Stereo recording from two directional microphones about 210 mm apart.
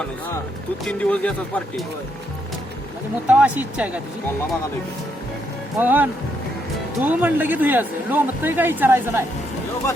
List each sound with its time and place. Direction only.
0.9 s speech: 5° left (ahead or behind)
3.2 s speech: 5° right (ahead or behind)
5.8 s speech: 10° right (ahead or behind)